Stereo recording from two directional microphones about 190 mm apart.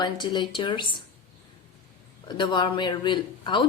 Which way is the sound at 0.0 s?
25° left (ahead or behind).